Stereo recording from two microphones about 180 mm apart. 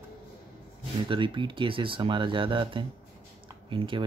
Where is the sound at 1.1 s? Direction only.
25° right (ahead or behind).